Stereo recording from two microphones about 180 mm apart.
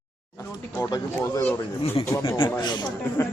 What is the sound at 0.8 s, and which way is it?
Speech, 20° left (ahead or behind).